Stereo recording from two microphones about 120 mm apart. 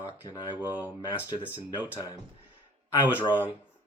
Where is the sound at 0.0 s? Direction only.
30° left (ahead or behind).